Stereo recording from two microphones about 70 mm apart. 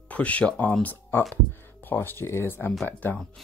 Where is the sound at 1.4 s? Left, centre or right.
Left.